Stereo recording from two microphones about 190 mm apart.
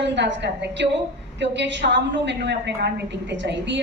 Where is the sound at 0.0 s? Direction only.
65° right (ahead or behind).